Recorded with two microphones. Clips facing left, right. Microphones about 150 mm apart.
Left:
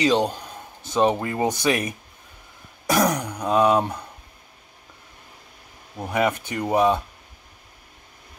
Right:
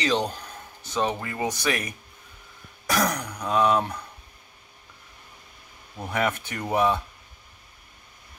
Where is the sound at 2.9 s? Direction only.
25° left (ahead or behind).